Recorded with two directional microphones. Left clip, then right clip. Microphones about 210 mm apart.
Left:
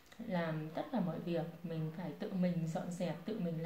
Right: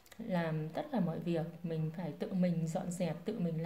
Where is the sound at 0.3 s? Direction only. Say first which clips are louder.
Right 2 dB; 45° right (ahead or behind).